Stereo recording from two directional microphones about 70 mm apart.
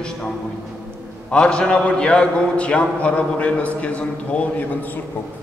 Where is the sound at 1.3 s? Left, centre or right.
Centre.